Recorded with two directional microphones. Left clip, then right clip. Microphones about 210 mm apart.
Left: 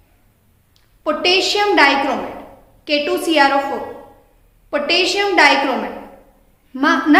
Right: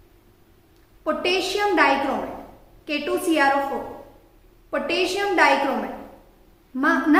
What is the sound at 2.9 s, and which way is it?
Speech, 35° left (ahead or behind).